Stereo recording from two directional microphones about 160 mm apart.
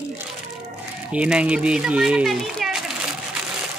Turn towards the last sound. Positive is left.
turn(degrees=-5)  # may be behind; listen again after turning